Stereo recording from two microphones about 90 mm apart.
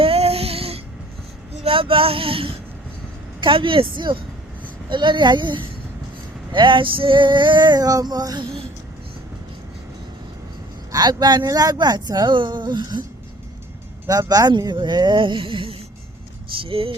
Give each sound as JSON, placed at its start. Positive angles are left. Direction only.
{"t": 0.0, "sound": "music", "side_deg": -90}
{"t": 1.6, "sound": "a sound", "side_deg": -85}
{"t": 3.4, "sound": "a woman's voice", "side_deg": -70}
{"t": 4.9, "sound": "male singing", "side_deg": -60}
{"t": 10.9, "sound": "speech", "side_deg": -50}
{"t": 14.1, "sound": "male singing", "side_deg": -45}
{"t": 16.6, "sound": "speech", "side_deg": -90}